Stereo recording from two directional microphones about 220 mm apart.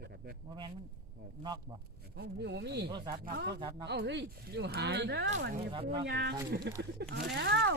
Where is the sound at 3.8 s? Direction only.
50° right (ahead or behind).